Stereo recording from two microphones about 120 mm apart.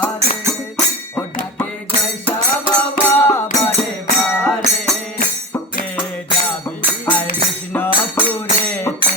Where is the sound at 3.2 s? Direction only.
25° left (ahead or behind).